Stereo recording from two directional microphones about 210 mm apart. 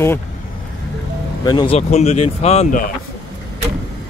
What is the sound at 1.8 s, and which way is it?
Speech, 30° left (ahead or behind).